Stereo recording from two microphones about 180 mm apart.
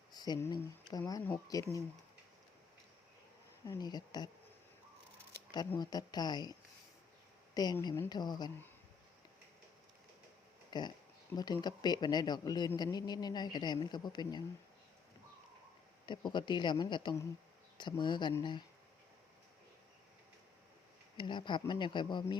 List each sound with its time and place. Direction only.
0.1 s speech: 20° left (ahead or behind)
3.7 s speech: 20° left (ahead or behind)
5.5 s speech: 20° left (ahead or behind)
10.7 s speech: 25° left (ahead or behind)
16.0 s speech: 25° left (ahead or behind)
21.2 s speech: 25° left (ahead or behind)